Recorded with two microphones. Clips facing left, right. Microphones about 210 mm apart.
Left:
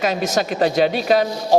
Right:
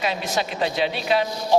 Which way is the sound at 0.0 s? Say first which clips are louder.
Left 5 dB; 45° left (ahead or behind).